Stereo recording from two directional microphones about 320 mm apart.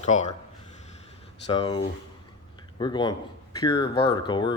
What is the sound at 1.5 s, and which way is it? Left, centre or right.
Speech, centre.